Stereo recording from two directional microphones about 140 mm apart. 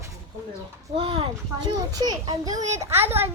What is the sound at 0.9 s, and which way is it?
Speech, 40° right (ahead or behind).